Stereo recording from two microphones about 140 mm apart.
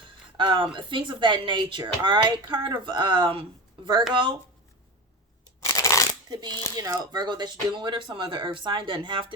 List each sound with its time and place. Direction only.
0.3 s speech: 35° right (ahead or behind)
5.5 s a sound: 25° left (ahead or behind)
6.2 s speech: 30° right (ahead or behind)